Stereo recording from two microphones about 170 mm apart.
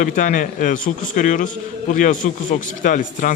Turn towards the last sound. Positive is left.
turn(degrees=50)  # may be behind; listen again after turning